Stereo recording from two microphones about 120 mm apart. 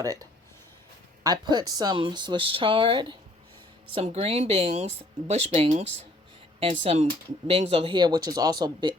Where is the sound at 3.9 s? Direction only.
55° right (ahead or behind).